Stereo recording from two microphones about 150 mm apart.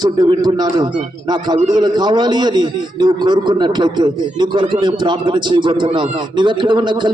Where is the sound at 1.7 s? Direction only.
25° right (ahead or behind).